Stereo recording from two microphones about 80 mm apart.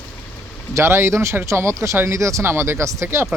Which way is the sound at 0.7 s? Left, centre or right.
Right.